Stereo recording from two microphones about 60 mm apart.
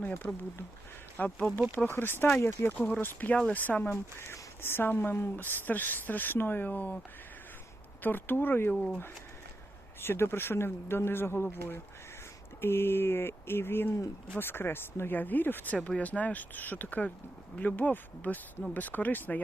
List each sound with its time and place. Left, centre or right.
0.0 s speech: left
1.9 s speech: left
4.3 s speech: left
8.0 s speech: left
8.7 s speech: centre
10.0 s speech: left
16.0 s speech: left